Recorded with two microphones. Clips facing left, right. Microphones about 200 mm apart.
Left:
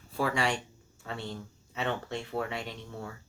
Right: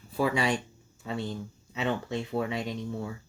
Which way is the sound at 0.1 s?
20° right (ahead or behind).